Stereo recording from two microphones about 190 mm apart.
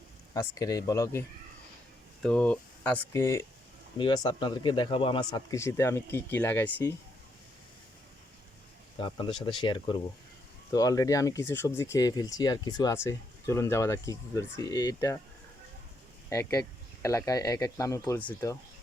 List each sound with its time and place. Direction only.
0.3 s speech: 20° left (ahead or behind)
2.2 s speech: 5° left (ahead or behind)
9.0 s speech: 25° left (ahead or behind)
16.3 s speech: 15° left (ahead or behind)